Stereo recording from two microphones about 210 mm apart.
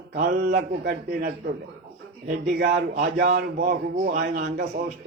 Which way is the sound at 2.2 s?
50° right (ahead or behind).